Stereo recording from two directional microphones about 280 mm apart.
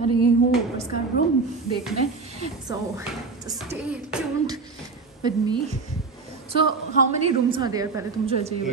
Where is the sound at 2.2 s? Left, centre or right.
Right.